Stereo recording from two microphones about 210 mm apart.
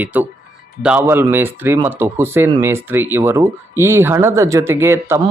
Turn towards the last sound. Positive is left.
turn(degrees=-10)  # may be behind; listen again after turning